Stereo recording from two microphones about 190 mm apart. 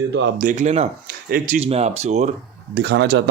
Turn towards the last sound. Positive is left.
turn(degrees=-60)  # may be behind; listen again after turning